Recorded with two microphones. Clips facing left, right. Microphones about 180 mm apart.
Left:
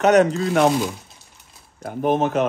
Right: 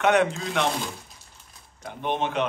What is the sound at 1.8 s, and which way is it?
Speech, 45° left (ahead or behind).